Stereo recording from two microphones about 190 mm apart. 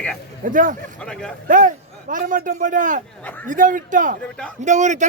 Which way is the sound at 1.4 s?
45° right (ahead or behind).